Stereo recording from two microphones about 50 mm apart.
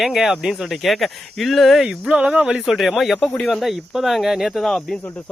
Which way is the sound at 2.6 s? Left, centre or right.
Centre.